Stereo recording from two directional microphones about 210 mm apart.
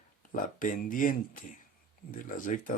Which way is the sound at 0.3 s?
40° left (ahead or behind).